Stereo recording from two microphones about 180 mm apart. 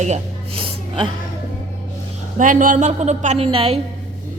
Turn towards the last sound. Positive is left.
turn(degrees=-30)  # may be behind; listen again after turning